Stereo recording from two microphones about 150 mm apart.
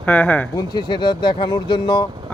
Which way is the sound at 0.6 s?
30° left (ahead or behind).